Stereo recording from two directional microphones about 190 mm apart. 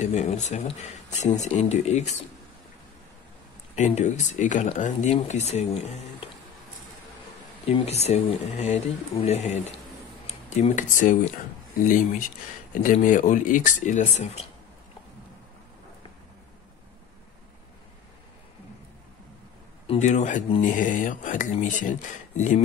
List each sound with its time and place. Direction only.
0.0 s speech: 40° left (ahead or behind)
3.7 s speech: 40° left (ahead or behind)
7.6 s speech: 30° left (ahead or behind)
10.8 s speech: 40° left (ahead or behind)
19.9 s speech: 40° left (ahead or behind)